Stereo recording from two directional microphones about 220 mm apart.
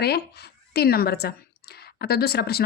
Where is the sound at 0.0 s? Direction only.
45° left (ahead or behind).